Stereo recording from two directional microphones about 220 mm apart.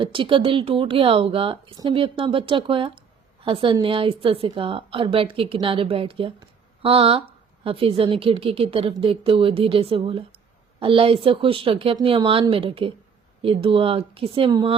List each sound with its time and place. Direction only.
0.0 s a woman's voice: 25° right (ahead or behind)